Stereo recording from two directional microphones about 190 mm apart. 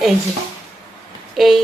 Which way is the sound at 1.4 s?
Centre (ahead or behind).